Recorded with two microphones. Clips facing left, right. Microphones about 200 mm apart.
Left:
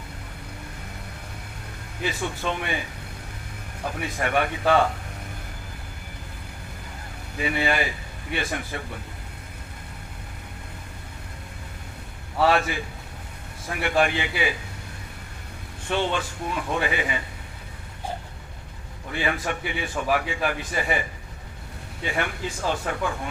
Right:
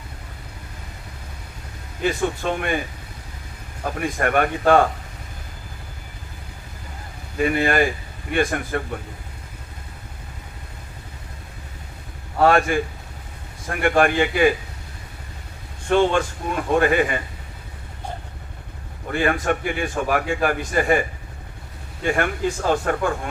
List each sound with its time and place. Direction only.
2.0 s a man's voice: 50° right (ahead or behind)
4.0 s a man's voice: 55° right (ahead or behind)
7.3 s a man's voice: 50° right (ahead or behind)
12.4 s a man's voice: 50° right (ahead or behind)
13.7 s a man's voice: 50° right (ahead or behind)
15.9 s a man's voice: 55° right (ahead or behind)
19.1 s a man's voice: 55° right (ahead or behind)
22.0 s a man's voice: 50° right (ahead or behind)